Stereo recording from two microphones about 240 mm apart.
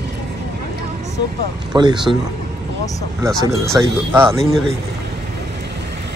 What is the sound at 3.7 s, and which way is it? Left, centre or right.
Speech, centre.